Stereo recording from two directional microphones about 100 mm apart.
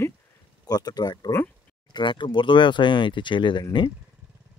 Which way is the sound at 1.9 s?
55° left (ahead or behind).